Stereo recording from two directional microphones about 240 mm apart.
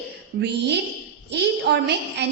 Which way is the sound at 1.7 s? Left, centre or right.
Right.